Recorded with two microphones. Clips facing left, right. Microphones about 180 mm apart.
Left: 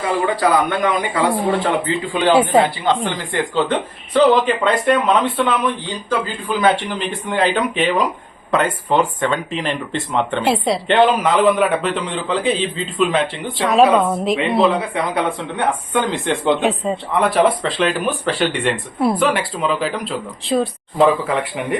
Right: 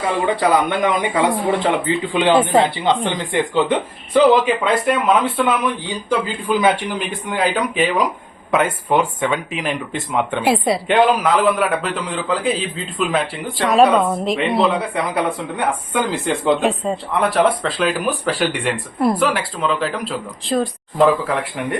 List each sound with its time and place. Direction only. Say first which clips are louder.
0.3 s speech: even; 20° right (ahead or behind)
2.3 s speech: left 1 dB; 10° left (ahead or behind)
2.6 s speech: right 1 dB; 20° right (ahead or behind); by 21.8 s centre (ahead or behind)